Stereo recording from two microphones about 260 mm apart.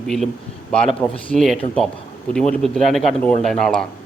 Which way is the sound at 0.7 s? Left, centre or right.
Centre.